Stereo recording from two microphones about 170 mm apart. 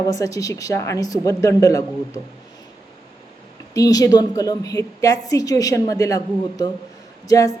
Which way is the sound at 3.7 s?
20° left (ahead or behind).